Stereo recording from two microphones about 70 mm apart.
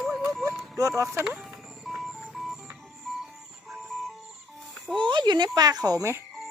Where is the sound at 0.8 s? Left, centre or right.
Right.